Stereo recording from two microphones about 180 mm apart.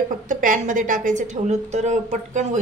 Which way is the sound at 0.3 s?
45° right (ahead or behind).